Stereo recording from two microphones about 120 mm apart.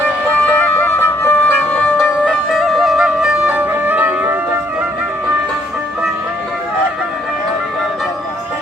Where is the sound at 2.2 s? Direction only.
Centre (ahead or behind).